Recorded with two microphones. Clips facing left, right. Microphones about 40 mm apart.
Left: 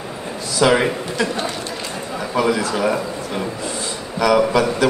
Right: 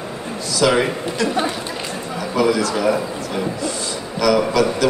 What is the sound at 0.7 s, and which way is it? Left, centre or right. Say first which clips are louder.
Speech: left 1 dB; centre.